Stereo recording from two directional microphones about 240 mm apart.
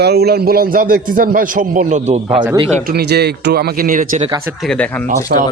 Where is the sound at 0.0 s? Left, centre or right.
Right.